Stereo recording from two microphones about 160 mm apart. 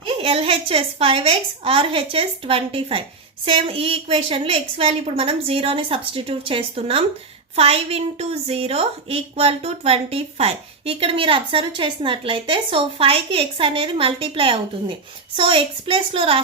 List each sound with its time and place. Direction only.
0.0 s a woman's voice: 35° right (ahead or behind)